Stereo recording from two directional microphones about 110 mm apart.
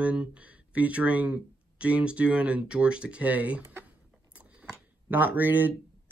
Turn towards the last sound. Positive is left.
turn(degrees=-15)  # may be behind; listen again after turning